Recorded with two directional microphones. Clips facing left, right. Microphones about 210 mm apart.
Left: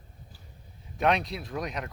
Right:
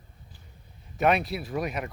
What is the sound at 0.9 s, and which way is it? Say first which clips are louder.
Speech: right 2 dB; 5° right (ahead or behind).